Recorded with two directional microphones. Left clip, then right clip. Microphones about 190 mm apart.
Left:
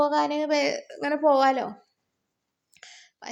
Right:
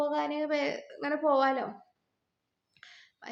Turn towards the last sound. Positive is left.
turn(degrees=30)  # may be behind; listen again after turning